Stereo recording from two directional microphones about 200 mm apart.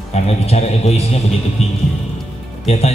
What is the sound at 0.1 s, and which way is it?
A man's voice, 30° left (ahead or behind).